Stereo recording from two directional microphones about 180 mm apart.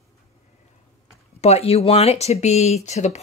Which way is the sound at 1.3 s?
35° left (ahead or behind).